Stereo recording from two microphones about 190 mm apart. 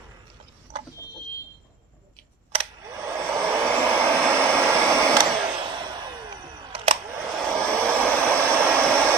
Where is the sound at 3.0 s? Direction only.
15° right (ahead or behind).